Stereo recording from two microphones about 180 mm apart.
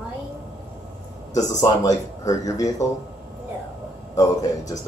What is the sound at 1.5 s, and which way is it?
Speech, 20° left (ahead or behind).